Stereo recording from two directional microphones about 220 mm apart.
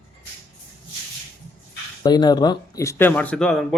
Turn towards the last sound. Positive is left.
turn(degrees=5)  # may be behind; listen again after turning